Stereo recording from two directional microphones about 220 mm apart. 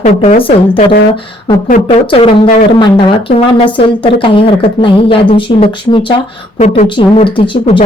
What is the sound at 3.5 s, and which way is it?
A woman's voice, 20° left (ahead or behind).